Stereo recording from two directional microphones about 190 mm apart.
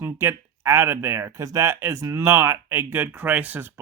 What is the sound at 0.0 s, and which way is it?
Speech, 10° right (ahead or behind).